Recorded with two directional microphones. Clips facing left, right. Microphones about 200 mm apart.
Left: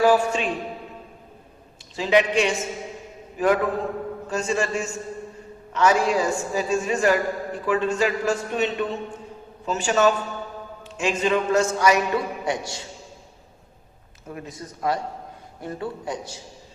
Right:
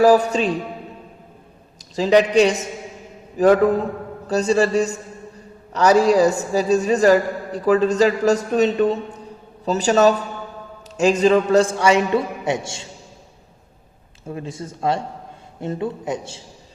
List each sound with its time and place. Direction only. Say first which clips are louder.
0.0 s a woman's voice: right 5 dB; 40° right (ahead or behind)
2.0 s a woman's voice: right 6 dB; 40° right (ahead or behind)
14.3 s speech: right 6 dB; 30° right (ahead or behind)